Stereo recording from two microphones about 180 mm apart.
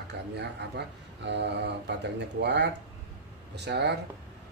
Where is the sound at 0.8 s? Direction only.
65° right (ahead or behind).